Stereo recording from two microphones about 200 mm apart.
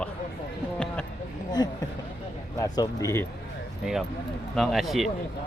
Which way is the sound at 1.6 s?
20° left (ahead or behind).